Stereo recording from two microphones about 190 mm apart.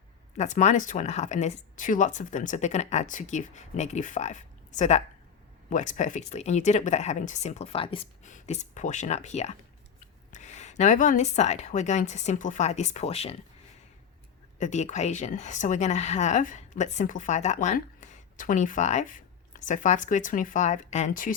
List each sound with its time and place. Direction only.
0.3 s speech: 40° left (ahead or behind)
14.6 s speech: 40° left (ahead or behind)